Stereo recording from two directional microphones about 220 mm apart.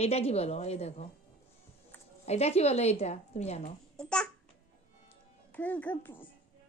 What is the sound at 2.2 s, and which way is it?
A woman's voice, 30° left (ahead or behind).